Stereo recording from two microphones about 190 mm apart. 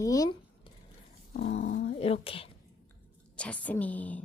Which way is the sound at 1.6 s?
40° left (ahead or behind).